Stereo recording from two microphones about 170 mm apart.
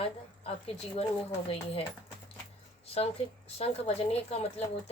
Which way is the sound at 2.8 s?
35° left (ahead or behind).